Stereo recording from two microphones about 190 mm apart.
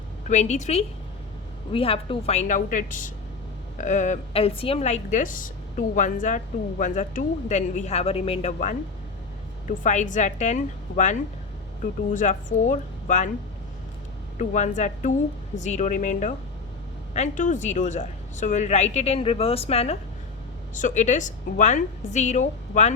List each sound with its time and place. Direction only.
0.3 s speech: 40° left (ahead or behind)
14.3 s speech: 40° left (ahead or behind)